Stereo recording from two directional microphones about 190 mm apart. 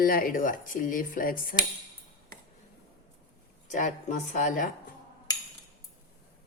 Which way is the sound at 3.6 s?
40° left (ahead or behind).